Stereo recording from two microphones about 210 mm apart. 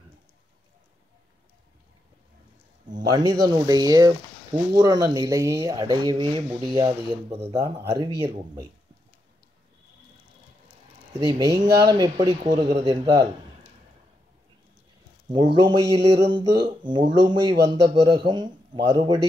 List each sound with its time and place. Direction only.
3.1 s speech: 20° right (ahead or behind)
11.1 s speech: 15° right (ahead or behind)
15.3 s speech: 20° right (ahead or behind)